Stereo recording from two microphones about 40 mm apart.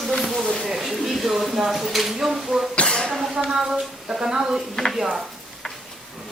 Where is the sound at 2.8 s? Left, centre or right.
Left.